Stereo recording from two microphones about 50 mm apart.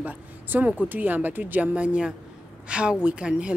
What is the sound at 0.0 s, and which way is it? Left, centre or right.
Speech, right.